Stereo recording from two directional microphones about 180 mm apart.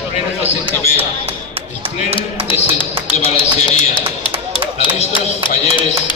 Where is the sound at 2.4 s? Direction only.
30° left (ahead or behind).